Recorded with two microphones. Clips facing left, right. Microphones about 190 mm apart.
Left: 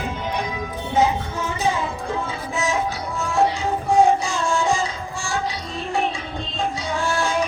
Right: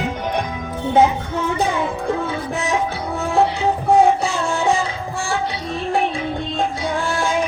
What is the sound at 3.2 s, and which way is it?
Music, 60° right (ahead or behind).